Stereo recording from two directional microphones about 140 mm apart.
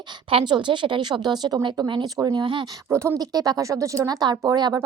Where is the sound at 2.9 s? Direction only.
20° right (ahead or behind).